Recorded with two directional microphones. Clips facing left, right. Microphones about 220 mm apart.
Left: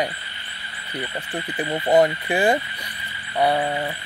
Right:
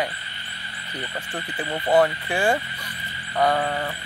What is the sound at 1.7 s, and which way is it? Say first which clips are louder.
Speech: left 2 dB; 20° left (ahead or behind).